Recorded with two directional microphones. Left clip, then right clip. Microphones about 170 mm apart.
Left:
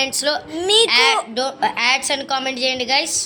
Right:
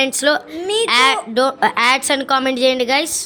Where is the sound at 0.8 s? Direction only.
90° right.